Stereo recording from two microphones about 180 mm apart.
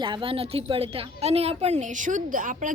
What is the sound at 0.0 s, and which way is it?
A woman's voice, 30° right (ahead or behind).